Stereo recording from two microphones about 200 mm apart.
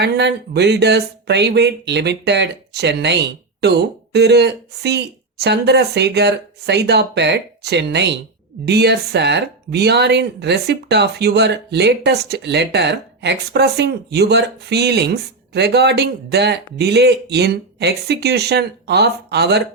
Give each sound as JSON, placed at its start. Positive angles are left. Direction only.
{"t": 0.0, "sound": "speech", "side_deg": -55}